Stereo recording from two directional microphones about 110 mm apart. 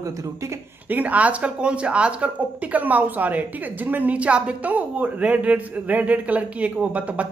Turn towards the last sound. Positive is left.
turn(degrees=-10)  # may be behind; listen again after turning